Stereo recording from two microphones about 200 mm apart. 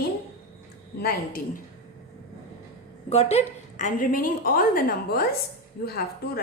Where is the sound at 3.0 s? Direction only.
30° left (ahead or behind); by 6.4 s 50° left (ahead or behind).